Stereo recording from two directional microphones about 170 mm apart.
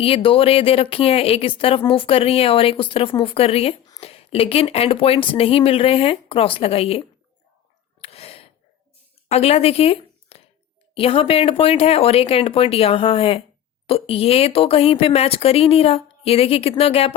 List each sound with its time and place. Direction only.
0.0 s speech: 30° left (ahead or behind)
8.0 s sigh: 35° left (ahead or behind)
9.3 s a woman's voice: 35° left (ahead or behind)